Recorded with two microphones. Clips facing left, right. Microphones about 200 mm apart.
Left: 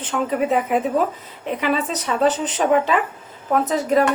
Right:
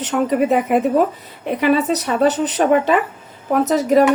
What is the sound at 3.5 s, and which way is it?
Speech, 70° right (ahead or behind).